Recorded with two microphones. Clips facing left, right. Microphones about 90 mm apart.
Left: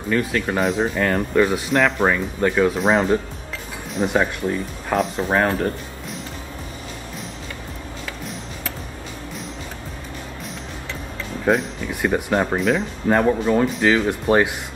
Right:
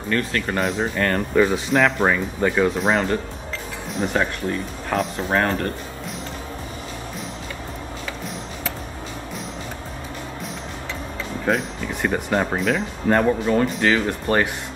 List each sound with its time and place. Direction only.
0.1 s speech: 5° left (ahead or behind)
11.4 s speech: 5° left (ahead or behind)